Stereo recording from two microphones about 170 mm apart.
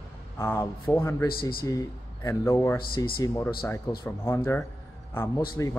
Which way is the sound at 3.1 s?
30° left (ahead or behind).